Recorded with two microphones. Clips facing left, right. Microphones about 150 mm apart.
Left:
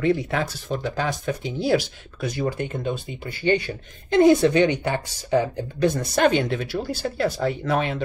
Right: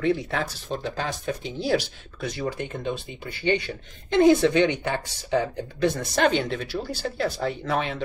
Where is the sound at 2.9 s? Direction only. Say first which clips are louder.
Left 2 dB; 45° left (ahead or behind).